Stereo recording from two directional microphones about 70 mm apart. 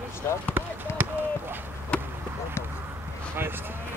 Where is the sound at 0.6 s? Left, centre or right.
Right.